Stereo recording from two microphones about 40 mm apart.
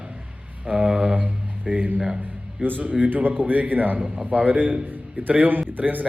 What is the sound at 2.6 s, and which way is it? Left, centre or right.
A man's voice, right.